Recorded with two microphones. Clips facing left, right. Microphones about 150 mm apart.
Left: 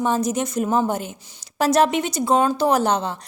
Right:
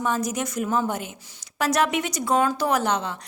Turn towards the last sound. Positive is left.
turn(degrees=35)  # may be behind; listen again after turning